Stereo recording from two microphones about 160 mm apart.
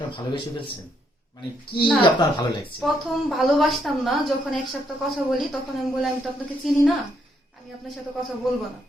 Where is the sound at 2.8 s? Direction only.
Centre (ahead or behind).